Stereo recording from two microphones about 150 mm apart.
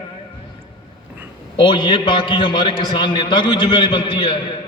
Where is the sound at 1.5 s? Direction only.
30° left (ahead or behind).